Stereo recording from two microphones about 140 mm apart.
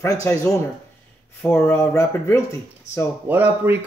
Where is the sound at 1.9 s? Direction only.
20° left (ahead or behind).